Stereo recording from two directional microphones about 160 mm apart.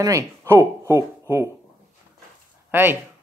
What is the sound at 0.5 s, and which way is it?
Speech, 15° right (ahead or behind).